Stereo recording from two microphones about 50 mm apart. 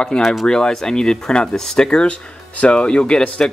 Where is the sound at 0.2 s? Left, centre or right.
Centre.